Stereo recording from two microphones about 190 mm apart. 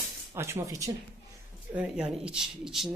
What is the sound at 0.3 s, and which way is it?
Speech, 15° right (ahead or behind).